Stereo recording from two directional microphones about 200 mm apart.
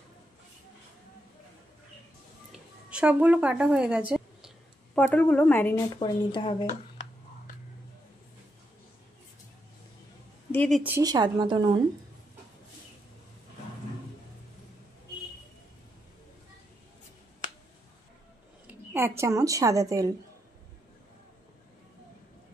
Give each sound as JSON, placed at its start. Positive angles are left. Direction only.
{"t": 2.9, "sound": "a woman's voice", "side_deg": -5}
{"t": 4.9, "sound": "a woman's voice", "side_deg": 10}
{"t": 5.9, "sound": "speech", "side_deg": 25}
{"t": 10.5, "sound": "speech", "side_deg": 5}
{"t": 10.8, "sound": "a woman's voice", "side_deg": -15}
{"t": 18.7, "sound": "speech", "side_deg": -10}